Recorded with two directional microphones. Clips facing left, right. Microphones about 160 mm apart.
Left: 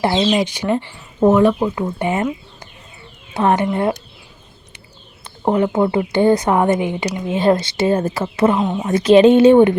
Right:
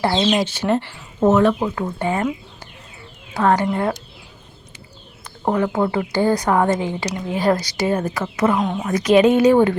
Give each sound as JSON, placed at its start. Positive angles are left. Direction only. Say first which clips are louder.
{"t": 0.0, "sound": "speech", "louder": "left 2 dB", "side_deg": 15}
{"t": 2.0, "sound": "a woman's voice", "louder": "left 1 dB", "side_deg": 20}
{"t": 3.3, "sound": "a woman's voice", "louder": "left 1 dB", "side_deg": 20}
{"t": 5.5, "sound": "a woman's voice", "louder": "left 3 dB", "side_deg": 20}
{"t": 8.5, "sound": "speech", "louder": "left 2 dB", "side_deg": 5}
{"t": 8.8, "sound": "a woman's voice", "louder": "left 5 dB", "side_deg": 25}